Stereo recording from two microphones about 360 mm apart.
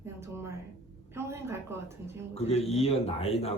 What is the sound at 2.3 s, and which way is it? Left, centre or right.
Speech, centre.